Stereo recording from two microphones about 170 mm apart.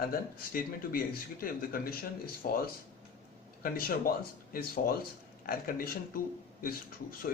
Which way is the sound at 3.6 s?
60° left (ahead or behind).